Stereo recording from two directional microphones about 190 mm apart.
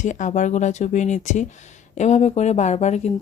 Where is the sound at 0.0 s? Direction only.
40° left (ahead or behind).